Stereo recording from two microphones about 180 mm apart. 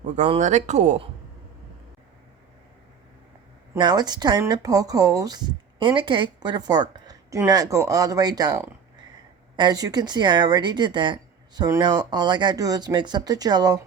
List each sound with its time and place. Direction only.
0.2 s speech: 40° right (ahead or behind)
3.8 s speech: 25° right (ahead or behind)